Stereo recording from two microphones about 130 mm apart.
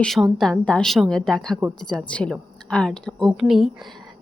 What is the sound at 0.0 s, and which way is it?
A woman's voice, centre (ahead or behind).